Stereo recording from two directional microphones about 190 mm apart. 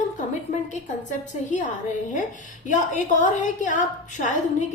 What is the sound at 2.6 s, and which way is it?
A woman's voice, 40° left (ahead or behind).